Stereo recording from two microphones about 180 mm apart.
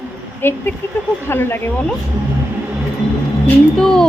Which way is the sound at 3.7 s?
5° left (ahead or behind).